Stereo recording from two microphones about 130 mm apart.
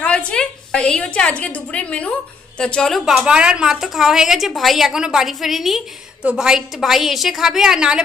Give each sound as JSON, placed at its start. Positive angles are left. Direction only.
{"t": 0.0, "sound": "a woman's voice", "side_deg": 10}